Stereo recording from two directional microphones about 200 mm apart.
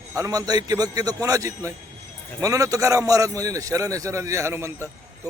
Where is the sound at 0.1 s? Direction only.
15° right (ahead or behind).